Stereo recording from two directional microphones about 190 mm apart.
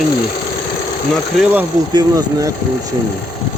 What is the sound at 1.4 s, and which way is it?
Speech, 10° right (ahead or behind).